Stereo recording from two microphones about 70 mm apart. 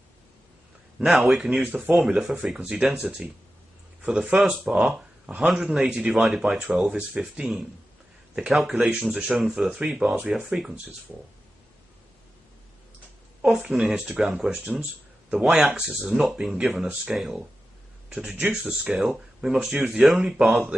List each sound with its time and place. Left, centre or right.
1.0 s speech: centre
1.6 s speech: centre
2.0 s speech: centre
4.3 s speech: right
4.6 s speech: centre
4.9 s a sound: centre
5.4 s speech: centre
9.8 s speech: centre
13.4 s speech: centre
18.6 s speech: centre